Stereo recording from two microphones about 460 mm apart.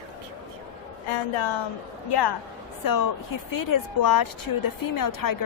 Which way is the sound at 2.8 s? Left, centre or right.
Left.